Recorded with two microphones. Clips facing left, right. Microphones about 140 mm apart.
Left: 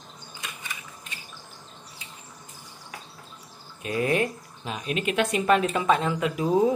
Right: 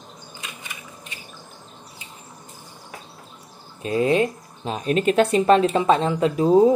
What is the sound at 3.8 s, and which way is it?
Speech, 25° right (ahead or behind).